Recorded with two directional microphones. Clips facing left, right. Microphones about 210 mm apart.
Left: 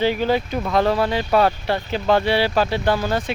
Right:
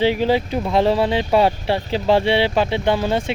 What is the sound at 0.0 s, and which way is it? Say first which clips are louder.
Speech: right 2 dB; 25° right (ahead or behind).